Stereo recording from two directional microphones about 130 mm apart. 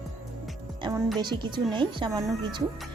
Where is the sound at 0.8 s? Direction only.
40° right (ahead or behind).